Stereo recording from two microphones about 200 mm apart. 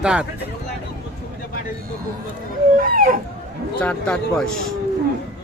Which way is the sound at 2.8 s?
45° right (ahead or behind).